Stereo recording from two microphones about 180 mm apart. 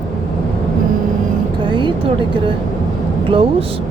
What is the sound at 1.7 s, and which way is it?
Speech, 25° right (ahead or behind).